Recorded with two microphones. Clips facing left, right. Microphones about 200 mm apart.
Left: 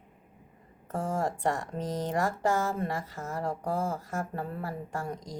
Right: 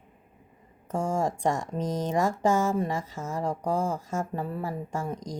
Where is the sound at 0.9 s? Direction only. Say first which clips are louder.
Right 3 dB; 15° right (ahead or behind).